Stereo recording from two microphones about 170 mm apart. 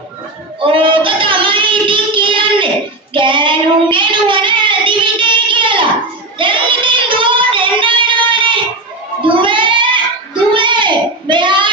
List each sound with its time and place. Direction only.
0.6 s child singing: 30° right (ahead or behind)